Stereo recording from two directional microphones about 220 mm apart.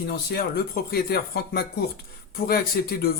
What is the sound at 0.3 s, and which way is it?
Speech, 45° left (ahead or behind).